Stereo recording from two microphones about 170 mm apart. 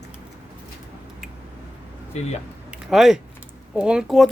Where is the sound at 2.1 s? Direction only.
40° left (ahead or behind).